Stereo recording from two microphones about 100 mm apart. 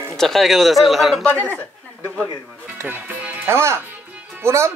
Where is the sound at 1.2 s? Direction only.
15° left (ahead or behind).